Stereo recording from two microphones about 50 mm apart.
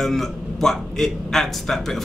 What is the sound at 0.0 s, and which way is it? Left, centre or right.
A man's voice, centre.